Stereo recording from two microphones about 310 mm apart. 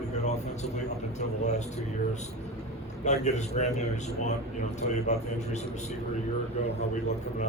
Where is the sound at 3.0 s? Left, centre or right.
Left.